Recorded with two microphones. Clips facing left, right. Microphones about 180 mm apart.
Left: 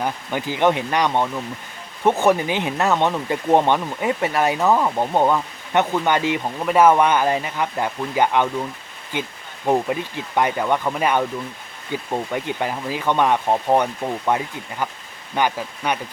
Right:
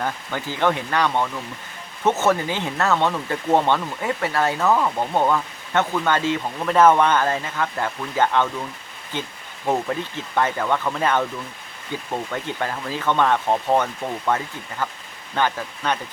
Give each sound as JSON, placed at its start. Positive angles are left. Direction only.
{"t": 0.0, "sound": "speech", "side_deg": 15}